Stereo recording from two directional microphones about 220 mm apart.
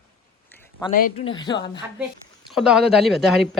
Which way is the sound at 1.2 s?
20° left (ahead or behind).